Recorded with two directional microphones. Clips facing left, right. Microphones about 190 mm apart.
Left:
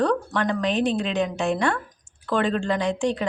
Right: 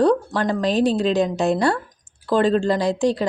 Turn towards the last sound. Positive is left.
turn(degrees=-35)  # may be behind; listen again after turning